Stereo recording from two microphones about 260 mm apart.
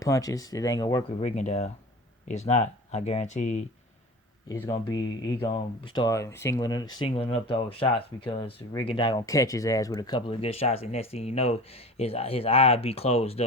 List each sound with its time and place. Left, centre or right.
0.0 s speech: centre
1.2 s speech: left
4.4 s speech: centre